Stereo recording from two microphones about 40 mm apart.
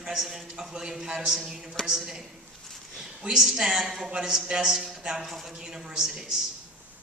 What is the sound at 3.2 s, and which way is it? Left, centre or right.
A man's voice, centre.